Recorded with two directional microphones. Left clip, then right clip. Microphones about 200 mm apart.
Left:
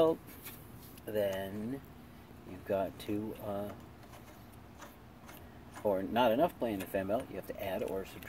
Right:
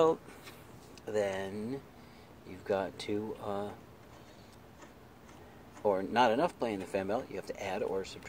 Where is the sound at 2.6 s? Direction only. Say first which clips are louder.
Right 1 dB; 10° right (ahead or behind).